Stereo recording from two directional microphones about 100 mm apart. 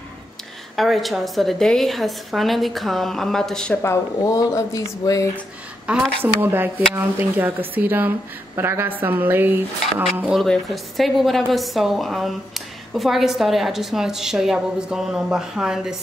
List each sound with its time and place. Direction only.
0.7 s a woman's voice: centre (ahead or behind)
3.8 s speech: 30° left (ahead or behind)
5.9 s speech: 10° right (ahead or behind)
10.3 s a woman's voice: centre (ahead or behind)